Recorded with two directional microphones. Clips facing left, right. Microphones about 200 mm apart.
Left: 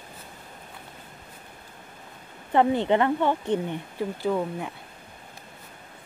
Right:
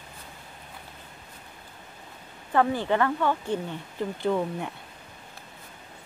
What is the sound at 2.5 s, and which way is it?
Speech, 20° left (ahead or behind).